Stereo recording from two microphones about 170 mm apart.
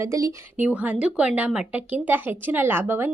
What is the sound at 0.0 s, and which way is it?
Speech, 20° right (ahead or behind).